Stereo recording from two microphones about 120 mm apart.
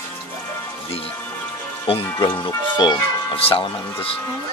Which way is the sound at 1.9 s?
50° left (ahead or behind).